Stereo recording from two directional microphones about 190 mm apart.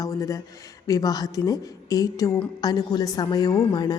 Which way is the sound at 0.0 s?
15° left (ahead or behind).